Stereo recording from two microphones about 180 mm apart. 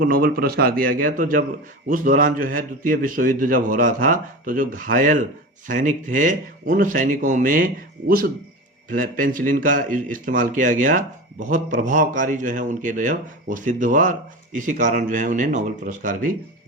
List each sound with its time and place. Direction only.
0.0 s a man's voice: 55° right (ahead or behind)